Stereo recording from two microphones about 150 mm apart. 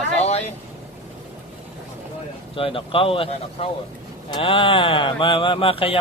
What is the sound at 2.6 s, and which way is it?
Speech, 35° left (ahead or behind).